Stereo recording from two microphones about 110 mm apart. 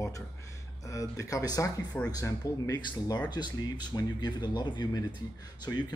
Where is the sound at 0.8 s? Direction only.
30° left (ahead or behind).